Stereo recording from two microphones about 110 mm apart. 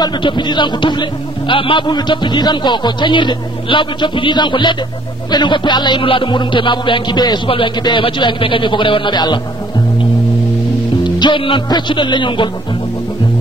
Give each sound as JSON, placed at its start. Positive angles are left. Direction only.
{"t": 0.0, "sound": "music", "side_deg": 45}
{"t": 11.1, "sound": "music", "side_deg": 45}